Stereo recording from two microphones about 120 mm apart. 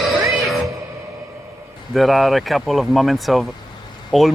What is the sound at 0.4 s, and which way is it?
Music, centre (ahead or behind).